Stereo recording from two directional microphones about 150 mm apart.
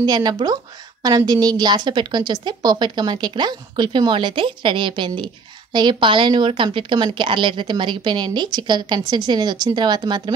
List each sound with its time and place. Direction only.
0.0 s a woman's voice: 25° right (ahead or behind)